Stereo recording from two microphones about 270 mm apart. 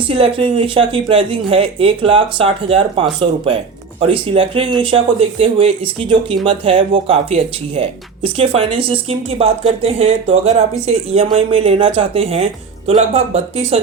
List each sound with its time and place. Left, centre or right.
0.1 s speech: centre